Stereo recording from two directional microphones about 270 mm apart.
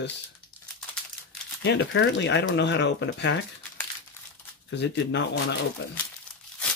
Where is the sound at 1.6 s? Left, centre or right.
Left.